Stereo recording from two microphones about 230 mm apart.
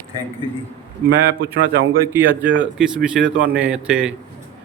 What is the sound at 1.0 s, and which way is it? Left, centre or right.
Speech, right.